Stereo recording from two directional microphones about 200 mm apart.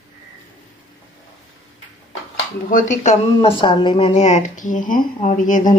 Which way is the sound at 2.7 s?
40° left (ahead or behind).